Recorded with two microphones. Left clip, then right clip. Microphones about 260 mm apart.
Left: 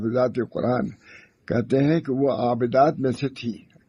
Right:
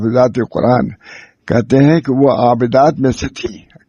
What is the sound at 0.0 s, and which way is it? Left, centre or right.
Speech, right.